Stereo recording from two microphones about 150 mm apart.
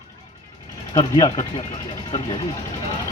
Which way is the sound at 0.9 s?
25° left (ahead or behind).